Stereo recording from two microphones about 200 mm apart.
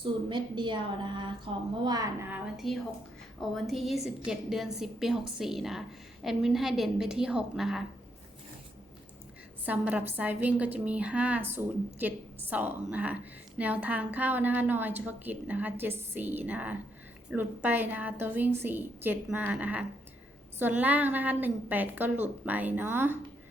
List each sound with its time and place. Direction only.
0.0 s a woman's voice: 25° right (ahead or behind)
2.3 s a woman's voice: centre (ahead or behind)
9.6 s a woman's voice: 10° right (ahead or behind)